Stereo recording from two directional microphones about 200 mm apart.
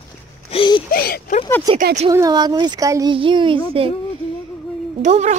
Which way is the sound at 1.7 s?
20° right (ahead or behind).